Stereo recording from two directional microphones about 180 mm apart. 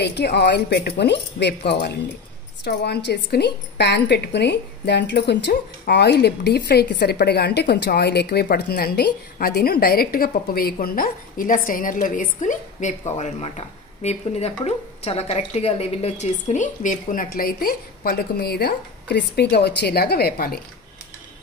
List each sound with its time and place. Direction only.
0.0 s a woman's voice: 65° left (ahead or behind)